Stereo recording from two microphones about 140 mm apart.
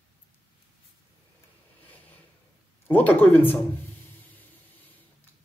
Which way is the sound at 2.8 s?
10° left (ahead or behind).